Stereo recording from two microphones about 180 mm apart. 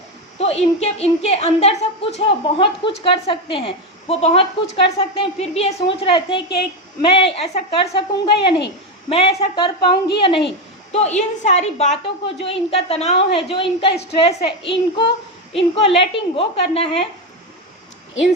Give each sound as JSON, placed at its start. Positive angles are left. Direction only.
{"t": 0.3, "sound": "a woman's voice", "side_deg": 35}
{"t": 10.9, "sound": "a woman's voice", "side_deg": 40}